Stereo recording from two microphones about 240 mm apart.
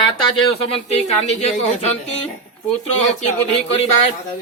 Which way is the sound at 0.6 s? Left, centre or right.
Left.